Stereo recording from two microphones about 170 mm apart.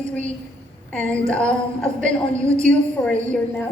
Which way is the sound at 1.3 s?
5° left (ahead or behind).